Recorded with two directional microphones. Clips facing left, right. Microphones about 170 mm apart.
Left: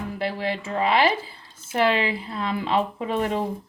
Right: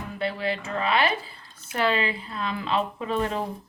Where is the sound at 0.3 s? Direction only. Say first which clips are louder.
Left 2 dB; 25° left (ahead or behind).